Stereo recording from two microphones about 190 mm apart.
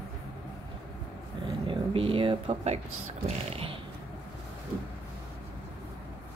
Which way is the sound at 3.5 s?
30° right (ahead or behind).